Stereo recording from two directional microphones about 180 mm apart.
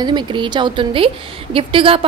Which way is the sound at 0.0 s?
25° right (ahead or behind).